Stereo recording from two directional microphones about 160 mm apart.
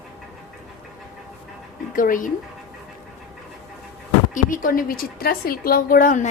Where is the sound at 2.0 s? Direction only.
55° left (ahead or behind).